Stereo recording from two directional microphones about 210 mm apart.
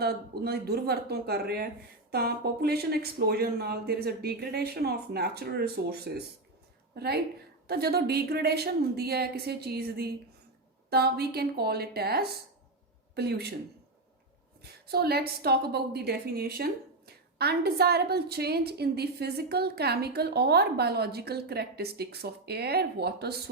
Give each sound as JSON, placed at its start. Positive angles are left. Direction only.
{"t": 0.0, "sound": "a woman's voice", "side_deg": -50}
{"t": 14.6, "sound": "a woman's voice", "side_deg": -50}